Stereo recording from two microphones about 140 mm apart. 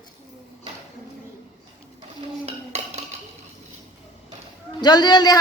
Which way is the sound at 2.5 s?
50° right (ahead or behind).